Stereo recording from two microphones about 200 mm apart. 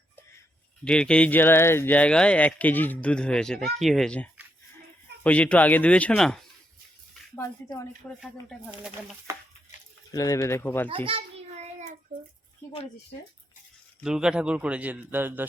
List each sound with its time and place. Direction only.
0.9 s speech: 5° left (ahead or behind)
8.2 s speech: centre (ahead or behind)
9.3 s a man's voice: 15° right (ahead or behind)
10.1 s speech: 15° left (ahead or behind)
10.8 s a sound: 25° right (ahead or behind)
14.0 s a man's voice: 5° right (ahead or behind)